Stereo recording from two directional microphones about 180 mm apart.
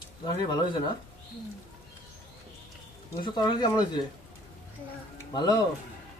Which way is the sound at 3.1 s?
25° left (ahead or behind).